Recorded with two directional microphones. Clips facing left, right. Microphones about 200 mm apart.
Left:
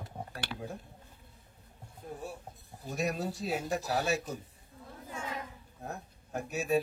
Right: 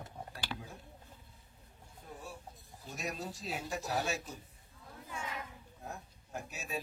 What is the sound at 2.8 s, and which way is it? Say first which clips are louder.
Speech: left 8 dB; 60° left (ahead or behind).